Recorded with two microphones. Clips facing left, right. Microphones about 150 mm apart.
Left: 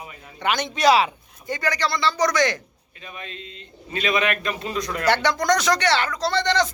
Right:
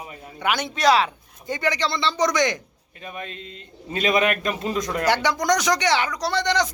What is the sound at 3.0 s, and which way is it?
Speech, 45° right (ahead or behind).